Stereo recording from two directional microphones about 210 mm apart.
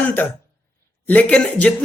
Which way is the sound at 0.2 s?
10° left (ahead or behind).